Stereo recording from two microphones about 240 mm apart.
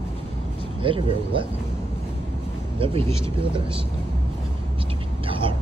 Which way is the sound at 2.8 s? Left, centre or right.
Right.